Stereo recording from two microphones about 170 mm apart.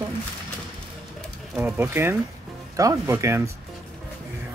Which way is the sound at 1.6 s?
15° right (ahead or behind).